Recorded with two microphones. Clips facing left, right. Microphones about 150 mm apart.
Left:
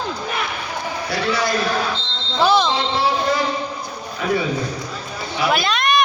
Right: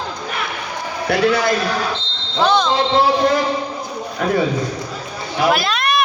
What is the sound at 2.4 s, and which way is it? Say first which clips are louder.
Speech: even; 5° left (ahead or behind).